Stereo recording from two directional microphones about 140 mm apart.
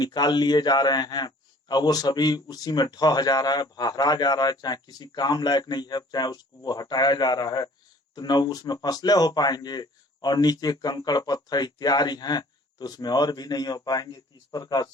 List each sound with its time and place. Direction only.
0.0 s a man's voice: 30° left (ahead or behind)